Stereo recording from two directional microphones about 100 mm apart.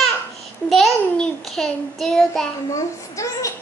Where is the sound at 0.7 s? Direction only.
5° left (ahead or behind).